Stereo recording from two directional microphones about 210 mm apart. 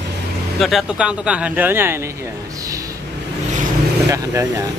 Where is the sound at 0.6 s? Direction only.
Centre (ahead or behind).